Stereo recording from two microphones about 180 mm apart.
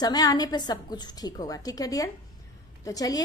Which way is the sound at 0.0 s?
20° left (ahead or behind).